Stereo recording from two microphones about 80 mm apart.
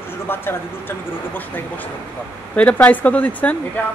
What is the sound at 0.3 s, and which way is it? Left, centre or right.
Speech, left.